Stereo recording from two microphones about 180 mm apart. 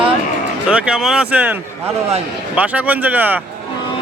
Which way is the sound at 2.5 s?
10° right (ahead or behind).